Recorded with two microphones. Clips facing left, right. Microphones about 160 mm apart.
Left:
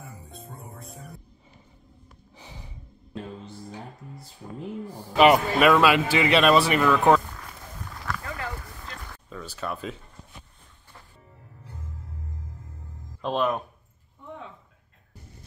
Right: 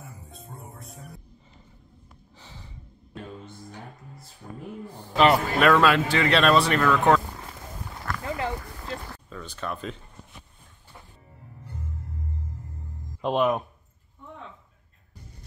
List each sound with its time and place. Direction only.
0.0 s music: 60° left (ahead or behind)
2.3 s gasp: 15° left (ahead or behind)
4.8 s a man's voice: 10° left (ahead or behind)
8.2 s a sound: 25° right (ahead or behind)
9.3 s speech: 5° left (ahead or behind)
13.2 s speech: 15° right (ahead or behind)